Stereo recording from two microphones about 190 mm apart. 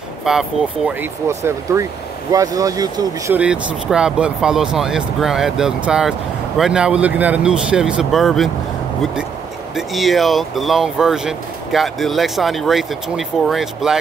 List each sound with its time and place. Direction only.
0.2 s speech: centre (ahead or behind)
1.2 s speech: 15° right (ahead or behind)
3.3 s speech: 5° right (ahead or behind)
9.8 s speech: centre (ahead or behind)